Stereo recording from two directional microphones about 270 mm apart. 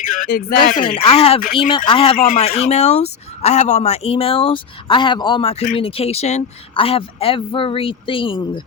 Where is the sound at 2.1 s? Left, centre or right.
Left.